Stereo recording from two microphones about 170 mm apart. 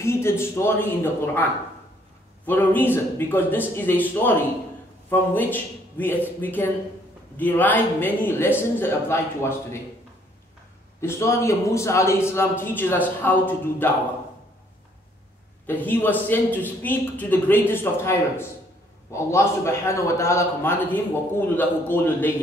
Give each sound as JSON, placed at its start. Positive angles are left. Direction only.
{"t": 0.0, "sound": "a man's voice", "side_deg": 15}
{"t": 2.4, "sound": "a man's voice", "side_deg": 10}
{"t": 11.0, "sound": "a man's voice", "side_deg": 15}
{"t": 15.6, "sound": "a man's voice", "side_deg": 10}